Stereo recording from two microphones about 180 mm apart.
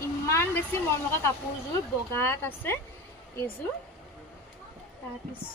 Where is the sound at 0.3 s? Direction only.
15° left (ahead or behind).